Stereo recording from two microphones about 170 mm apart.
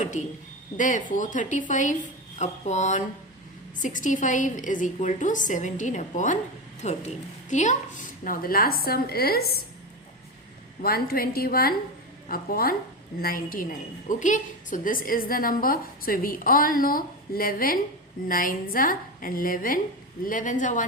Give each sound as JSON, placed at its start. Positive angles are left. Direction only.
{"t": 0.8, "sound": "a woman's voice", "side_deg": 50}
{"t": 10.8, "sound": "a woman's voice", "side_deg": 60}